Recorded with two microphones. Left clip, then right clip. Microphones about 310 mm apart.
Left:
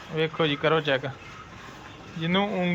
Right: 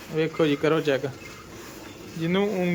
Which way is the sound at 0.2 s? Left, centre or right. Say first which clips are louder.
Right 2 dB; centre.